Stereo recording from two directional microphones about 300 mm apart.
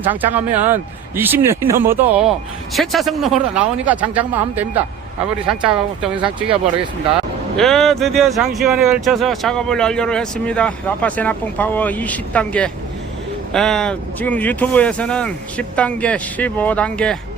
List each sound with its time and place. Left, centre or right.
0.0 s speech: centre
7.5 s speech: centre